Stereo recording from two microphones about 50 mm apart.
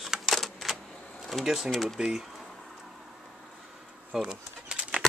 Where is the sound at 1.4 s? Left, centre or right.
Centre.